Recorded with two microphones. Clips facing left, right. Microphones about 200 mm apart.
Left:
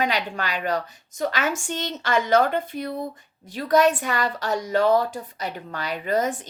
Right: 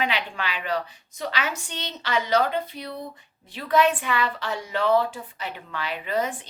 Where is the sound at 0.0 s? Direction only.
40° left (ahead or behind).